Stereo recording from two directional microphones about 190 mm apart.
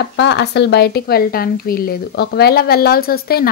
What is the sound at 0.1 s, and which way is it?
A woman's voice, 65° left (ahead or behind).